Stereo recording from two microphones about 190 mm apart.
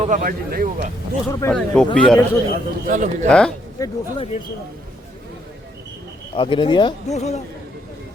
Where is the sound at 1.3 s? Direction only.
15° left (ahead or behind).